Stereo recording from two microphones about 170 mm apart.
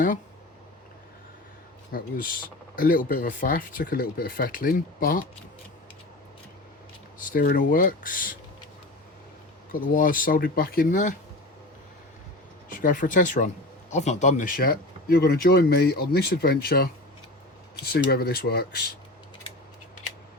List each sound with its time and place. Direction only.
1.9 s speech: 55° left (ahead or behind)
7.2 s speech: 55° left (ahead or behind)
9.7 s speech: 55° left (ahead or behind)
12.7 s speech: 50° left (ahead or behind)